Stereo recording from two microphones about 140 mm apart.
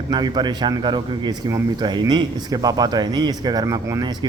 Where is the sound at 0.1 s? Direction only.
30° right (ahead or behind).